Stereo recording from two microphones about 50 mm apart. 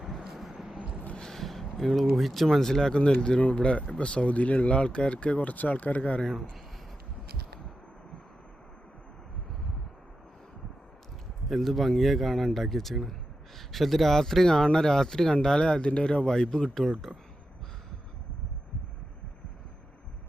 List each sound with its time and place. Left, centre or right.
0.3 s vehicle: centre
1.1 s a sound: centre
2.1 s speech: centre; by 6.2 s left
11.4 s speech: centre